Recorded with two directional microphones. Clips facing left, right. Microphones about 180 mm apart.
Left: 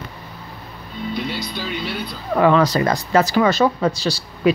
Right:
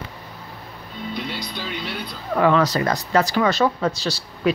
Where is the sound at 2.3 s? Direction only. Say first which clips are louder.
Left 3 dB; 20° left (ahead or behind).